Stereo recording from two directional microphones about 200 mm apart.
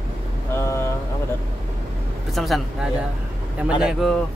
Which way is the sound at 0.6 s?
10° left (ahead or behind).